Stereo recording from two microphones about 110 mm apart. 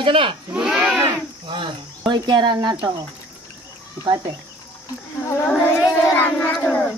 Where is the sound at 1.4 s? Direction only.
50° right (ahead or behind).